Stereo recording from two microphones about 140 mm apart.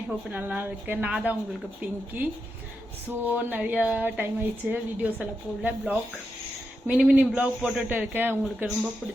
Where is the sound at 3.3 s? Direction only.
10° right (ahead or behind).